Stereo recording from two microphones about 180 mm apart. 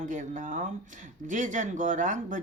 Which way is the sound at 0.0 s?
45° right (ahead or behind).